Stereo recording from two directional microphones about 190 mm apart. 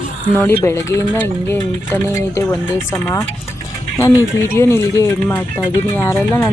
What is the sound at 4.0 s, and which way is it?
Speech, 15° left (ahead or behind).